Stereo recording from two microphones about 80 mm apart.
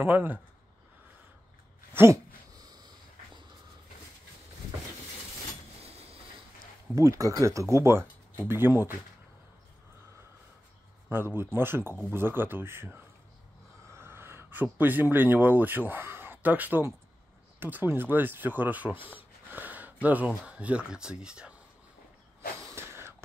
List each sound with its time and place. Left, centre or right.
0.0 s speech: right
2.0 s a sound: right
2.5 s sniff: right
7.0 s speech: right
11.1 s speech: right; by 21.5 s centre
22.6 s a sound: right